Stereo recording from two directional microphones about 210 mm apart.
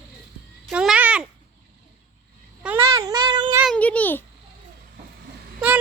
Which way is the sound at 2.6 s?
15° right (ahead or behind).